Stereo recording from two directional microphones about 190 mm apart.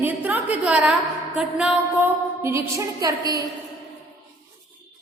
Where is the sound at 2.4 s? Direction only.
15° right (ahead or behind).